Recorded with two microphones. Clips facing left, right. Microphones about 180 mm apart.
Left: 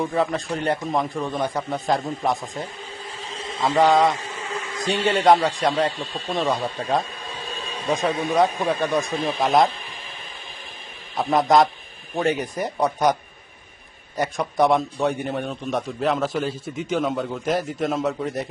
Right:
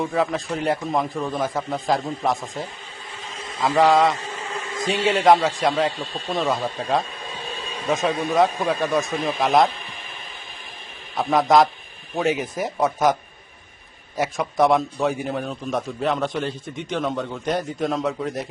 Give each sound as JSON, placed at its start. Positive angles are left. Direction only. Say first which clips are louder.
{"t": 0.0, "sound": "a man's voice", "louder": "even", "side_deg": 0}
{"t": 3.2, "sound": "a sound", "louder": "left 1 dB", "side_deg": 30}
{"t": 3.6, "sound": "a man's voice", "louder": "even", "side_deg": 0}
{"t": 11.2, "sound": "a man's voice", "louder": "right 1 dB", "side_deg": 0}
{"t": 14.2, "sound": "a man's voice", "louder": "right 1 dB", "side_deg": 0}